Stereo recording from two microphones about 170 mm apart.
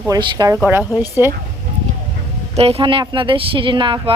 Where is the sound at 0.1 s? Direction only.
25° right (ahead or behind).